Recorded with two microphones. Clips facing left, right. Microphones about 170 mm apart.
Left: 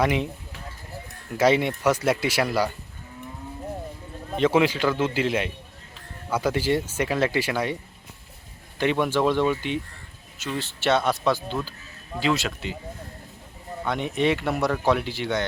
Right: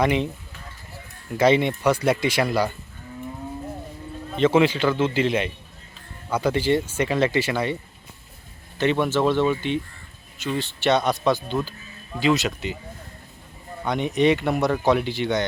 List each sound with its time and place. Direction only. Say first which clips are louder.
0.0 s speech: right 2 dB; 5° left (ahead or behind)
1.4 s speech: right 2 dB; 10° left (ahead or behind)
4.4 s speech: right 2 dB; 10° left (ahead or behind)
8.8 s speech: right 1 dB; 10° left (ahead or behind)
13.8 s speech: right 4 dB; centre (ahead or behind)